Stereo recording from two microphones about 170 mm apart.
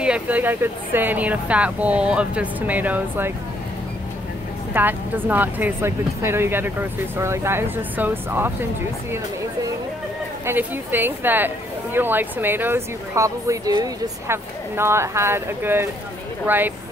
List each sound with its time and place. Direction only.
0.0 s speech: 10° right (ahead or behind)
4.7 s speech: 10° right (ahead or behind)
10.4 s speech: 10° right (ahead or behind)